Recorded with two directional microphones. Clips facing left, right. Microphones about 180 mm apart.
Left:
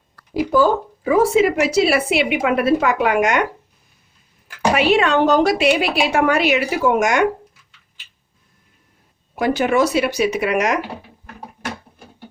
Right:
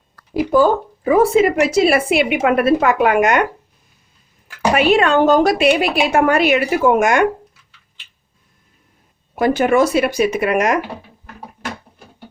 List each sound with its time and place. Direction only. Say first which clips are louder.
1.0 s a woman's voice: right 2 dB; 55° right (ahead or behind)
4.7 s a woman's voice: right 2 dB; 50° right (ahead or behind)
9.3 s a woman's voice: right 3 dB; 50° right (ahead or behind)